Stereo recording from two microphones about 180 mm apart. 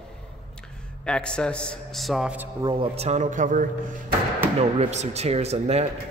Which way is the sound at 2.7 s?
30° right (ahead or behind).